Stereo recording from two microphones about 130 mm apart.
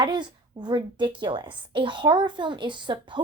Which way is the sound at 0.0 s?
35° right (ahead or behind).